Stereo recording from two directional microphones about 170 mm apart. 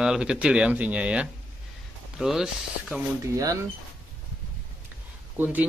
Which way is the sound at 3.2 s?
20° right (ahead or behind).